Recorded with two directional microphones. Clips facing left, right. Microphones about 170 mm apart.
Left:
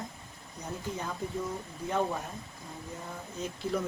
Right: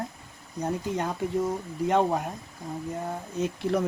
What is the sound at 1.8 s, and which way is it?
Speech, 80° right.